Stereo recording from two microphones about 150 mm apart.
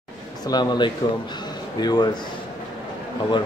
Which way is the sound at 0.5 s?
30° left (ahead or behind).